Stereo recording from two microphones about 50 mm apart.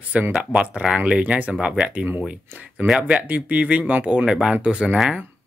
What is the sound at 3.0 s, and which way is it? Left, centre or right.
Speech, right.